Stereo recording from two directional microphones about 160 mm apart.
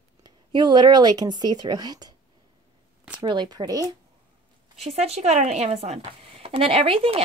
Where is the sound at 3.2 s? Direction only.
25° right (ahead or behind).